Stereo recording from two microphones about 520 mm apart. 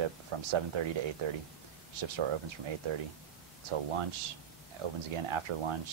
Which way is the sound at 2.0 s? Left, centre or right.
Right.